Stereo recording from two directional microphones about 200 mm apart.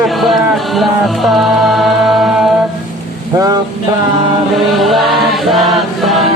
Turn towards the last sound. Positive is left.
turn(degrees=0)  # may be behind; listen again after turning